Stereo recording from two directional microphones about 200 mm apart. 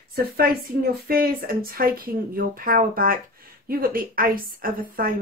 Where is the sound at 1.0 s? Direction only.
50° right (ahead or behind).